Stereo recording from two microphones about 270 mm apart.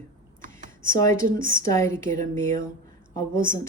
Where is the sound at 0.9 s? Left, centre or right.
Centre.